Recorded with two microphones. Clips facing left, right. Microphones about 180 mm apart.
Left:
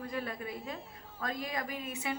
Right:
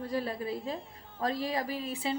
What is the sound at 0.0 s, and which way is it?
A woman's voice, 35° right (ahead or behind).